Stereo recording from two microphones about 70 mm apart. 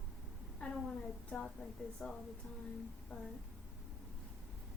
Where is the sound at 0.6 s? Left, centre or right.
Centre.